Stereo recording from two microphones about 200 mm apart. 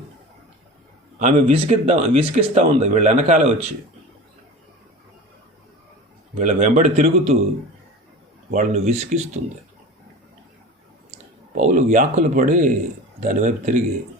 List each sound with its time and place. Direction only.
1.2 s speech: 35° right (ahead or behind)
6.3 s speech: 40° right (ahead or behind)
8.4 s speech: 40° right (ahead or behind)
11.1 s speech: 35° right (ahead or behind)